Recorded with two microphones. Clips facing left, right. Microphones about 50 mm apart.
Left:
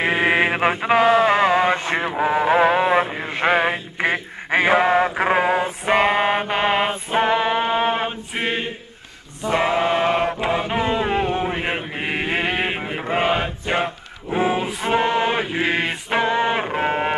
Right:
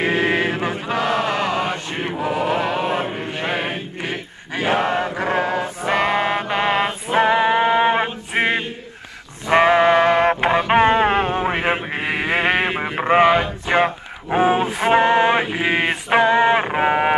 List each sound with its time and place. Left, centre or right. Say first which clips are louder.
0.2 s mantra: left 2 dB; left; by 6.4 s centre
6.5 s mantra: even; centre
7.1 s music: right 4 dB; centre
7.7 s chant: right 3 dB; right
9.5 s a sound: right 5 dB; right
12.3 s sheep: right 5 dB; right
14.4 s a sound: right 4 dB; right
15.6 s mantra: right 2 dB; right
16.6 s a sound: right 4 dB; centre